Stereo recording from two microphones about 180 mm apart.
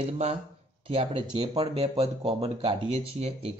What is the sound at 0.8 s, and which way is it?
Speech, 30° right (ahead or behind).